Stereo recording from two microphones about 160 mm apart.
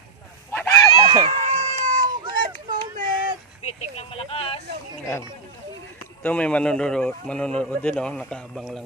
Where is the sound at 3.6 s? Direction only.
40° left (ahead or behind).